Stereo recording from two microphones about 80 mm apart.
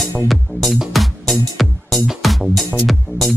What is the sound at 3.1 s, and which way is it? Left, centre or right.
Music, left.